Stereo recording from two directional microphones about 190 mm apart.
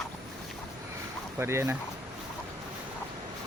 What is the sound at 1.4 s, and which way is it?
Speech, 15° right (ahead or behind).